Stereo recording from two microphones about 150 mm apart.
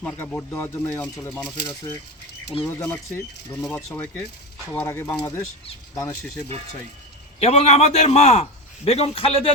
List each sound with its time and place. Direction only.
0.0 s speech: 10° left (ahead or behind)
7.3 s a man's voice: 45° left (ahead or behind)